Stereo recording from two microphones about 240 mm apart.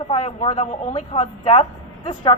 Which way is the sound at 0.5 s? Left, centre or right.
Left.